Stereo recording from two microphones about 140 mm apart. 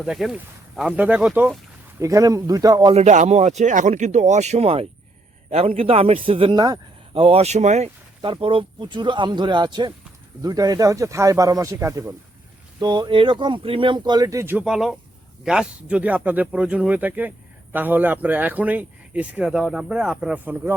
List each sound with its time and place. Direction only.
0.0 s speech: centre (ahead or behind)
2.0 s speech: 25° right (ahead or behind)
2.9 s speech: 55° right (ahead or behind); by 6.7 s 30° right (ahead or behind)
7.1 s speech: 40° right (ahead or behind)
8.2 s speech: 40° right (ahead or behind); by 12.1 s 20° right (ahead or behind)
12.8 s speech: 30° right (ahead or behind); by 14.7 s 15° right (ahead or behind)
14.7 s speech: centre (ahead or behind)